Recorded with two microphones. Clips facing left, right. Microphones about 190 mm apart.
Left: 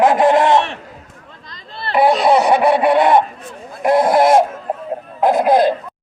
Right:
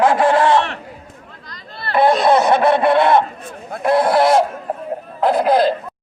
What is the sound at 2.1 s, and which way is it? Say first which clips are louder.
Speech: left 1 dB; 10° left (ahead or behind).